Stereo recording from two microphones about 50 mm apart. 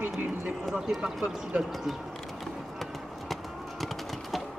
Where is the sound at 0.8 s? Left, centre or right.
Centre.